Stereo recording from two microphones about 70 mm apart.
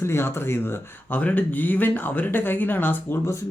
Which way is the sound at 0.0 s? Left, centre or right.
Left.